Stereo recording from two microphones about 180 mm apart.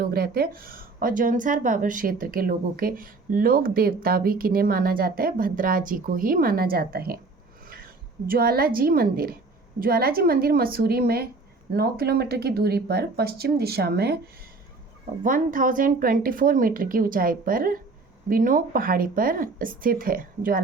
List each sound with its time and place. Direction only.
0.0 s speech: 55° right (ahead or behind)
8.3 s speech: 55° right (ahead or behind)
15.2 s speech: 50° right (ahead or behind)